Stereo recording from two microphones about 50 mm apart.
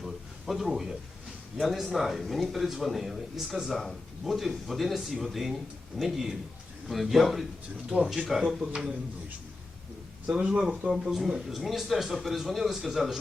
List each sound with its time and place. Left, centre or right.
0.0 s a sound: centre
1.6 s speech: centre
7.9 s speech: right
8.3 s speech: centre
10.2 s speech: right
10.9 s speech: centre